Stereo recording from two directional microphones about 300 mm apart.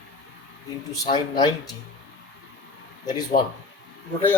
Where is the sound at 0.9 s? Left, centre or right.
Centre.